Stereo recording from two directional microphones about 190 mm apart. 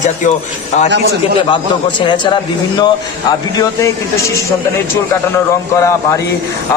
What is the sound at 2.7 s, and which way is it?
A man's voice, 20° left (ahead or behind).